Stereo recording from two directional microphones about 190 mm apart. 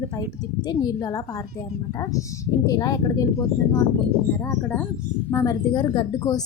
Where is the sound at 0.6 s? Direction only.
20° left (ahead or behind).